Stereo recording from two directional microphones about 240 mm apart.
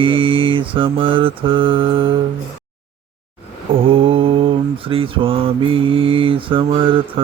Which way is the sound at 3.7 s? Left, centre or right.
Right.